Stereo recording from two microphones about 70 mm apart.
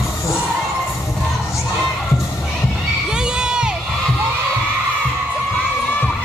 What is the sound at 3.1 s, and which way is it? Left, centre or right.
Crowd, centre.